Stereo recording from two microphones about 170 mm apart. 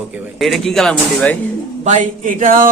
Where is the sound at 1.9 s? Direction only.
45° right (ahead or behind).